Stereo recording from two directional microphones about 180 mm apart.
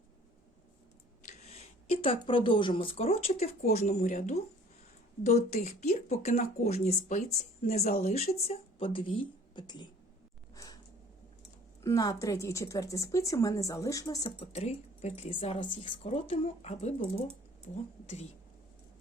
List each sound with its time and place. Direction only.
1.3 s speech: 35° left (ahead or behind)
10.5 s a sound: 20° left (ahead or behind)
11.8 s speech: 20° left (ahead or behind)
14.3 s speech: 35° left (ahead or behind)